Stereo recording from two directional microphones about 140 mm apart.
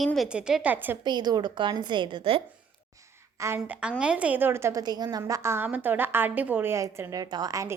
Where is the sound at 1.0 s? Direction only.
30° right (ahead or behind).